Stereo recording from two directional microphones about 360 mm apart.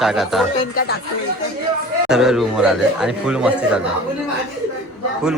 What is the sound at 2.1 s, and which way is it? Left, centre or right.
A man's voice, centre.